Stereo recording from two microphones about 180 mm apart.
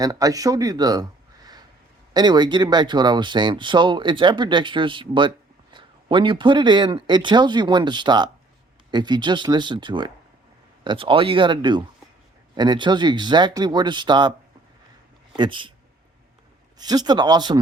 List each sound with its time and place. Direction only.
0.0 s speech: 20° right (ahead or behind)
2.1 s speech: 25° right (ahead or behind)
15.4 s speech: 30° right (ahead or behind)
16.7 s speech: 20° right (ahead or behind)